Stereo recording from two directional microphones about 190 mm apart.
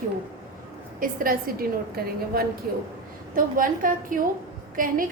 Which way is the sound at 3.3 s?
45° right (ahead or behind).